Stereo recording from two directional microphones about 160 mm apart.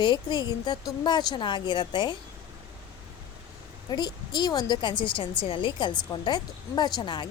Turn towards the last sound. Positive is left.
turn(degrees=30)  # may be behind; listen again after turning